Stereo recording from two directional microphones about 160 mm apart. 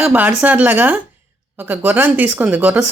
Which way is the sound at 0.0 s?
10° right (ahead or behind).